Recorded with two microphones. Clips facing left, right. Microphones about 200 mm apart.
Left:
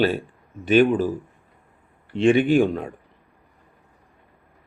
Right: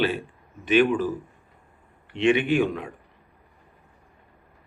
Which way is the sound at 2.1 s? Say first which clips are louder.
Left 4 dB; 35° left (ahead or behind).